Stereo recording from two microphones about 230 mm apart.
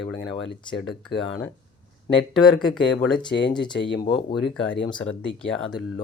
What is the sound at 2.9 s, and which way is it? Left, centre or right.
Speech, centre.